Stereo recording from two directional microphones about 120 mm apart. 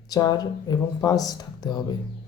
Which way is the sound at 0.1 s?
35° left (ahead or behind).